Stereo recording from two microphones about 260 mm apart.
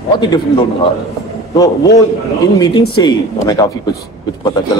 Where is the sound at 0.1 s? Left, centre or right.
Centre.